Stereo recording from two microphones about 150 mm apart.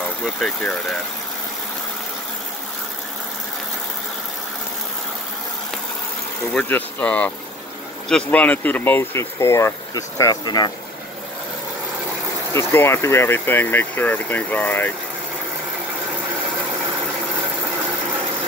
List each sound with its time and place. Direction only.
0.0 s speech: centre (ahead or behind)
6.5 s speech: 10° left (ahead or behind); by 10.7 s 30° left (ahead or behind)
12.5 s speech: 15° left (ahead or behind)